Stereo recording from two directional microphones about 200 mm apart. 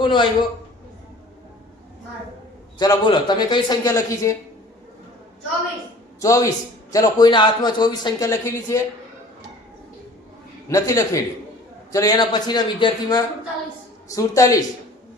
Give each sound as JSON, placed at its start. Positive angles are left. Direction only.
{"t": 0.0, "sound": "a man's voice", "side_deg": 25}
{"t": 2.7, "sound": "speech", "side_deg": 20}
{"t": 6.1, "sound": "a man's voice", "side_deg": 15}
{"t": 10.7, "sound": "a man's voice", "side_deg": 15}